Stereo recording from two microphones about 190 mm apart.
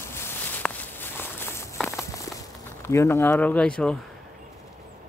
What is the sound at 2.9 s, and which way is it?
Speech, 15° left (ahead or behind).